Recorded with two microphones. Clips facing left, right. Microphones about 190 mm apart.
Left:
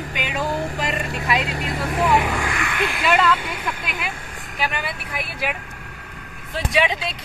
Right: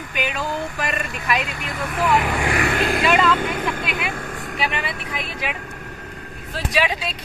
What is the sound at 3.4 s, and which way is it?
Speech, 50° right (ahead or behind).